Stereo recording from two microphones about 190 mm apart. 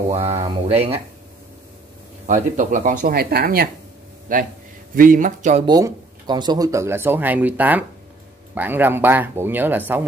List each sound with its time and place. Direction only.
0.1 s speech: 20° right (ahead or behind)
2.2 s speech: 40° right (ahead or behind)
4.9 s speech: 45° right (ahead or behind)
5.7 s speech: 20° right (ahead or behind)